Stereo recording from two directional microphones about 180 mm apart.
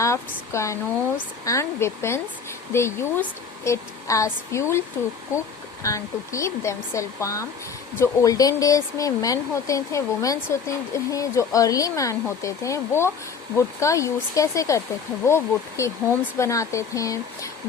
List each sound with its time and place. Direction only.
0.0 s speech: 15° left (ahead or behind)
5.8 s speech: 15° left (ahead or behind)